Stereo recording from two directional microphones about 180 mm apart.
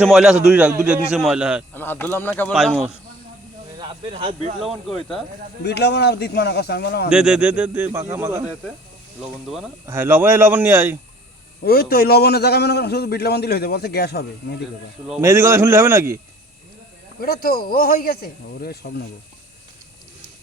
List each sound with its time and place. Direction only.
0.0 s a man's voice: centre (ahead or behind)
1.7 s speech: 10° left (ahead or behind)
2.5 s a man's voice: centre (ahead or behind)
3.8 s speech: 30° right (ahead or behind)
5.6 s a man's voice: 70° left (ahead or behind)
7.1 s speech: 5° right (ahead or behind)
9.8 s speech: 15° right (ahead or behind)
11.6 s a man's voice: 60° left (ahead or behind)
15.2 s speech: 15° right (ahead or behind)
17.2 s a man's voice: 55° left (ahead or behind)